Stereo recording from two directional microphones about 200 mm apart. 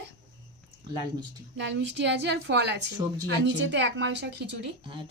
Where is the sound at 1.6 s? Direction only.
65° right (ahead or behind).